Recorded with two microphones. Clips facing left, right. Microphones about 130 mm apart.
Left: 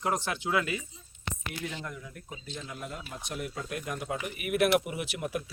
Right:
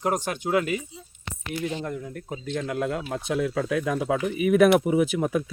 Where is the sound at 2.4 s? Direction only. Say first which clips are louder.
Right 14 dB; 75° right (ahead or behind).